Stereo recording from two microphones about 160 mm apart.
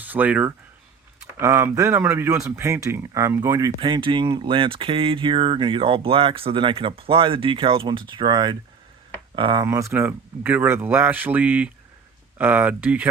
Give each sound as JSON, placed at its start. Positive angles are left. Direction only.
{"t": 0.0, "sound": "speech", "side_deg": -10}
{"t": 3.8, "sound": "speech", "side_deg": -30}
{"t": 9.6, "sound": "speech", "side_deg": -15}